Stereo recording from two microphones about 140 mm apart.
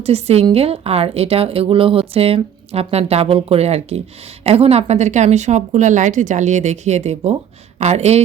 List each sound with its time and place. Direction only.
0.0 s a woman's voice: 45° right (ahead or behind)